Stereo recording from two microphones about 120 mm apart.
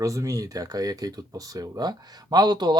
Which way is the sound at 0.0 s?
25° right (ahead or behind).